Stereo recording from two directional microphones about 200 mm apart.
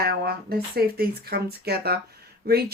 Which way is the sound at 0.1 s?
50° right (ahead or behind).